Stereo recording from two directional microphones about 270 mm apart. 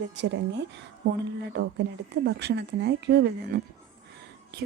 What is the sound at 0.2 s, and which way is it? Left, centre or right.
Speech, right.